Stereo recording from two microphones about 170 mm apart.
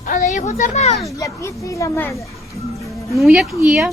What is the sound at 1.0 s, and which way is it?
Speech, 15° left (ahead or behind).